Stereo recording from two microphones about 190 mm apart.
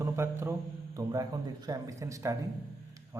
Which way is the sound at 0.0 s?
15° right (ahead or behind).